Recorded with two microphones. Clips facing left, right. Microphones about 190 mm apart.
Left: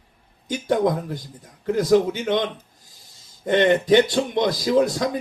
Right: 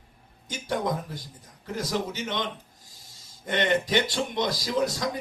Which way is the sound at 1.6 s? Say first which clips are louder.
Left 12 dB; 50° left (ahead or behind).